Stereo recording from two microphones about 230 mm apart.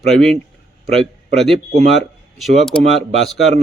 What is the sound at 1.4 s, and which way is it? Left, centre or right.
Speech, centre.